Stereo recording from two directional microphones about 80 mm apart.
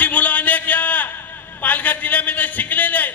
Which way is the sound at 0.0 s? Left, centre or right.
Centre.